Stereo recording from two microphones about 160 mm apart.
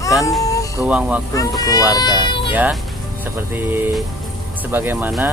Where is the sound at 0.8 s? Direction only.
10° right (ahead or behind).